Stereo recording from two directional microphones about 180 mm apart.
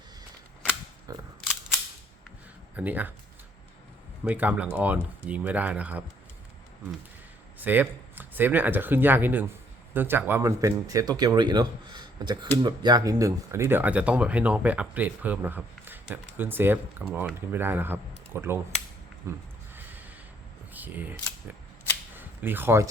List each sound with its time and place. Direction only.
1.1 s single-lens reflex camera: 20° right (ahead or behind)
2.7 s speech: 10° right (ahead or behind)
4.2 s speech: 10° right (ahead or behind)
7.6 s speech: 10° right (ahead or behind)
20.7 s speech: 10° right (ahead or behind)
22.1 s a sound: 10° right (ahead or behind)